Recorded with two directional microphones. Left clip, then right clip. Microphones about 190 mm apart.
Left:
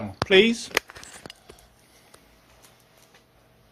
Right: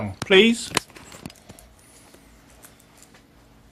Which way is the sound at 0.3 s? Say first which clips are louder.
Right 2 dB; 5° left (ahead or behind).